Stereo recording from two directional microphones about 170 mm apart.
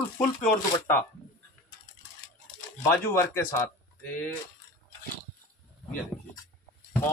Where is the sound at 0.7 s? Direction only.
10° left (ahead or behind).